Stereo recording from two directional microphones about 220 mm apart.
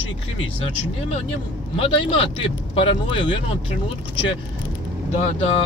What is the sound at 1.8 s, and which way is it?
Speech, 25° left (ahead or behind).